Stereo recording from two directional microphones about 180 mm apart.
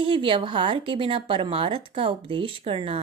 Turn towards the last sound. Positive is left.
turn(degrees=-30)  # may be behind; listen again after turning